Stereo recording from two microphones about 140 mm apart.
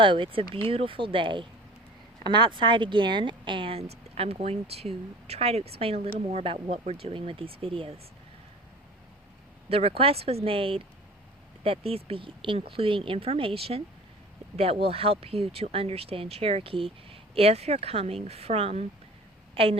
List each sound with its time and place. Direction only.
0.0 s speech: 35° right (ahead or behind)
9.6 s speech: 45° right (ahead or behind)